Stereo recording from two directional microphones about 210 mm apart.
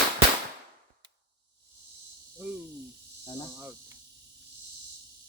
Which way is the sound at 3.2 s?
20° left (ahead or behind).